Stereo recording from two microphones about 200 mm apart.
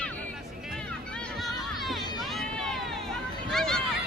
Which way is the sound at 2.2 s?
Centre (ahead or behind).